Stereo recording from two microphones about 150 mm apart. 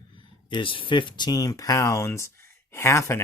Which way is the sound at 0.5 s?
35° left (ahead or behind).